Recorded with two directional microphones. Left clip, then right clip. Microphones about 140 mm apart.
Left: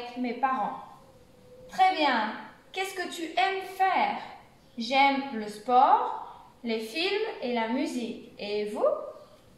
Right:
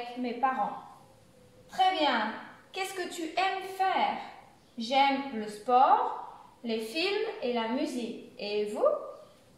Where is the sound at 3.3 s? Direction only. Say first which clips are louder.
Left 3 dB; 20° right (ahead or behind).